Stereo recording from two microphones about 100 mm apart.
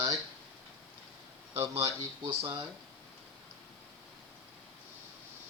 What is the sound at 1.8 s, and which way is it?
Speech, 30° right (ahead or behind).